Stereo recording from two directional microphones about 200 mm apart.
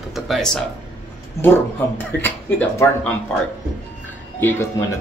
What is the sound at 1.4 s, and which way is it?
Speech, 10° left (ahead or behind).